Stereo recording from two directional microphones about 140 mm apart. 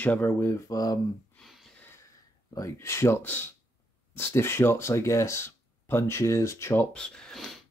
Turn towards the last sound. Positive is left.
turn(degrees=0)  # may be behind; listen again after turning